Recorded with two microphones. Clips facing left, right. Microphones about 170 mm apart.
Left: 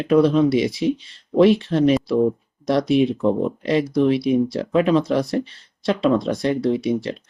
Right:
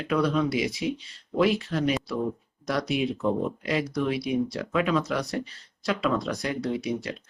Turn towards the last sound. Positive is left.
turn(degrees=30)  # may be behind; listen again after turning